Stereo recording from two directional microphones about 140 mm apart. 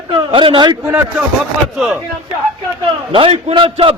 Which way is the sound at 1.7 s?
Centre (ahead or behind).